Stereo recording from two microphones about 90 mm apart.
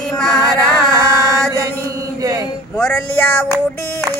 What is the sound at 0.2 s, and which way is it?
Music, 5° left (ahead or behind).